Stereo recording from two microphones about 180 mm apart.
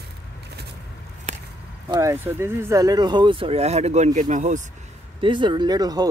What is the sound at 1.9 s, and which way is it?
Speech, 15° right (ahead or behind).